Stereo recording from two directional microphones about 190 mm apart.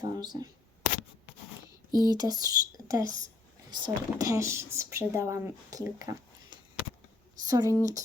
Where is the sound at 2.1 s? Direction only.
20° right (ahead or behind).